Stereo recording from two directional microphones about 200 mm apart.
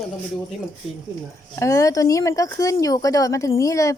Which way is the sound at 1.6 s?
15° left (ahead or behind).